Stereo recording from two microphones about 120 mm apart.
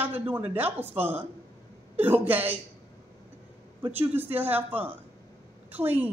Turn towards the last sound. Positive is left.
turn(degrees=-15)  # may be behind; listen again after turning